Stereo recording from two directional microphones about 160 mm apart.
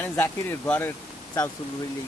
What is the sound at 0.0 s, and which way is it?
Speech, 15° left (ahead or behind).